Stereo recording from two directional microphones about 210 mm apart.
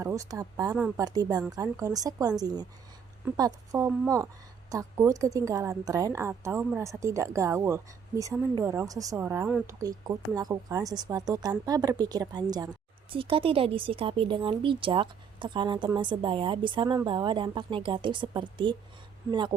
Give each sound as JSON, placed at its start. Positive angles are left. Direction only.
{"t": 0.0, "sound": "speech", "side_deg": -15}